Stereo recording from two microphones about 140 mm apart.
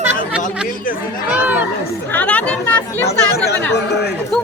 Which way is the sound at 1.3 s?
10° right (ahead or behind).